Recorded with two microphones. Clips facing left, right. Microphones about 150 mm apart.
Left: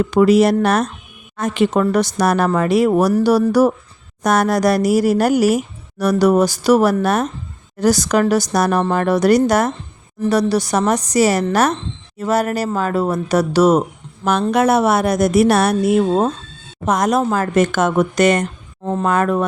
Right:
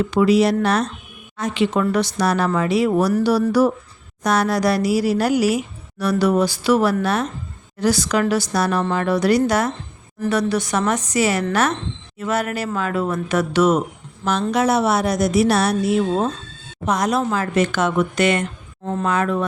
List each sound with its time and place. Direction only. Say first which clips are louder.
0.0 s a woman's voice: left 3 dB; 45° left (ahead or behind)
14.5 s a woman's voice: left 3 dB; 55° left (ahead or behind)